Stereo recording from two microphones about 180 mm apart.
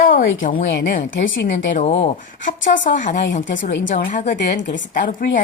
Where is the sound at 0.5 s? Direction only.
90° left.